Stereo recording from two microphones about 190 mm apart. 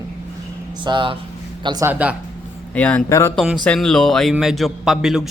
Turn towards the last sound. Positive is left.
turn(degrees=0)  # may be behind; listen again after turning